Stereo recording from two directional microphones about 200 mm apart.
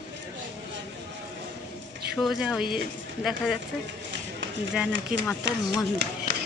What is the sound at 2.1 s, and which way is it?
Speech, centre (ahead or behind).